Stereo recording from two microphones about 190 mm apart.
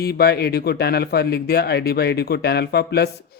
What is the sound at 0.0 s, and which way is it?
Speech, 55° left (ahead or behind).